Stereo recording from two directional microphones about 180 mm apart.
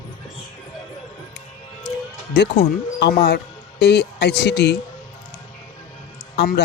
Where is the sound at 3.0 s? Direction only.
65° left (ahead or behind).